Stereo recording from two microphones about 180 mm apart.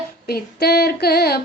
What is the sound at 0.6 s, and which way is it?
Female singing, 60° left (ahead or behind).